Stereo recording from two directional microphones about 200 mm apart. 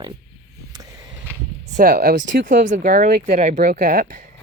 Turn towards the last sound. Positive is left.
turn(degrees=-45)  # may be behind; listen again after turning